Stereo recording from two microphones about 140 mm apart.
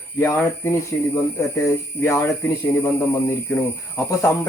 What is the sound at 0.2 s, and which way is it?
Speech, 20° left (ahead or behind).